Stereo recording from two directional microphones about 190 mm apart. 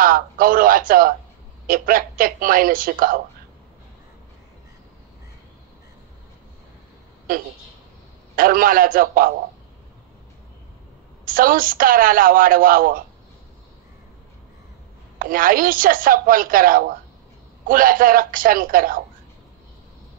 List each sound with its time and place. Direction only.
0.0 s a woman's voice: 50° right (ahead or behind)
7.3 s a woman's voice: 45° right (ahead or behind)
11.2 s a woman's voice: 50° right (ahead or behind)
15.1 s a woman's voice: 50° right (ahead or behind)